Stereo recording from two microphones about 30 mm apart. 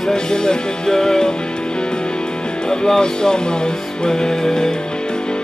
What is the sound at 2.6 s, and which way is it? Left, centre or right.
Music, centre.